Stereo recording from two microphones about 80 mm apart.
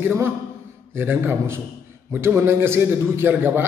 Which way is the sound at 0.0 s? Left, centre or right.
Right.